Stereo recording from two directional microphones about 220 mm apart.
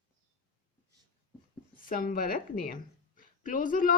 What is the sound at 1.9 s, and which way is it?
A woman's voice, 40° left (ahead or behind).